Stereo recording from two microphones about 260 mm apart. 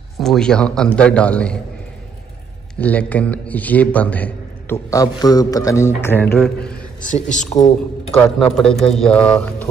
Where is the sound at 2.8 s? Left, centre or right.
Centre.